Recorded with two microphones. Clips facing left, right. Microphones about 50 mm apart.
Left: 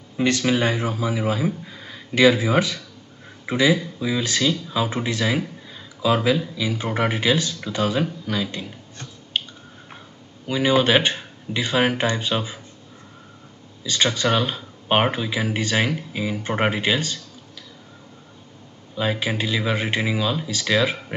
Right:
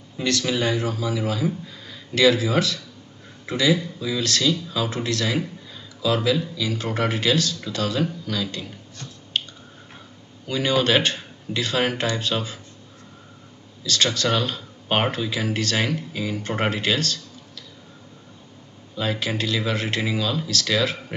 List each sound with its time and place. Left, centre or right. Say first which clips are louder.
0.2 s speech: left 3 dB; left
9.3 s squish: even; centre
10.4 s speech: left 3 dB; centre
13.8 s speech: left 1 dB; centre
18.9 s speech: left 2 dB; centre